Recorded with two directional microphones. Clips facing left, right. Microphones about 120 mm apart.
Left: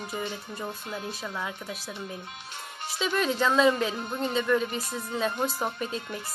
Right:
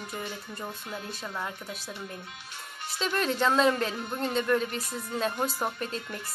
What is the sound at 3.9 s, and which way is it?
Speech, 25° left (ahead or behind).